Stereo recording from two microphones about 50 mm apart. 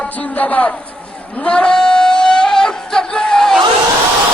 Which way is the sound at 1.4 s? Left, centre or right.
Centre.